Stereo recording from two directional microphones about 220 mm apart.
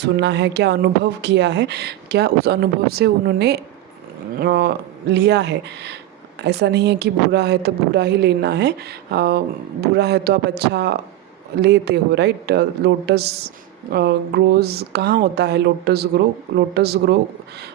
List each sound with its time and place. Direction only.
0.0 s speech: 50° right (ahead or behind)